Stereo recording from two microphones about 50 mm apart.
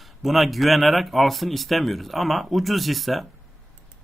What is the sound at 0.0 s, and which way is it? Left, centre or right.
Speech, centre.